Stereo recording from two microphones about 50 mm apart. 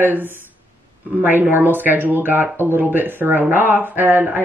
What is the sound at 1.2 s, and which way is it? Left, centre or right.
Speech, right.